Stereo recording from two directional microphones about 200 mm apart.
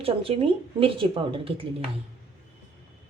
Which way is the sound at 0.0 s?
30° right (ahead or behind).